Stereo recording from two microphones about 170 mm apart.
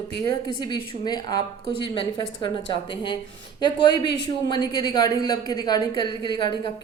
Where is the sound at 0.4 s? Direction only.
25° left (ahead or behind).